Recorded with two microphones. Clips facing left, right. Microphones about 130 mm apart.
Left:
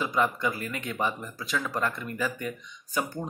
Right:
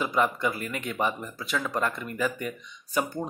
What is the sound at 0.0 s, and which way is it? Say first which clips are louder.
Speech: right 1 dB; 5° right (ahead or behind).